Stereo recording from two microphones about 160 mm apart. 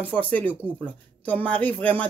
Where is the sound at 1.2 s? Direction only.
10° left (ahead or behind).